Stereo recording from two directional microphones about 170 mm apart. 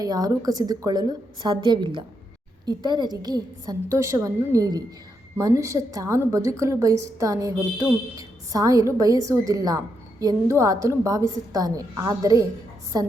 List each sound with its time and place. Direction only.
0.0 s a woman's voice: 20° right (ahead or behind)